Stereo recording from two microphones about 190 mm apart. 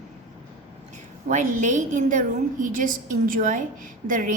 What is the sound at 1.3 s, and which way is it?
A woman's voice, 40° right (ahead or behind).